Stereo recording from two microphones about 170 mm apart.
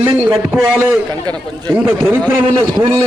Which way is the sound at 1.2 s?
25° right (ahead or behind).